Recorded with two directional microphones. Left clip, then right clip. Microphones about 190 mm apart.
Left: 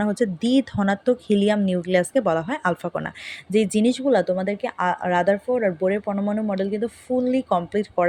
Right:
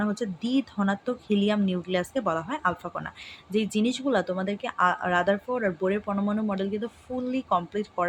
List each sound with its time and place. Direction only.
0.0 s speech: 30° left (ahead or behind)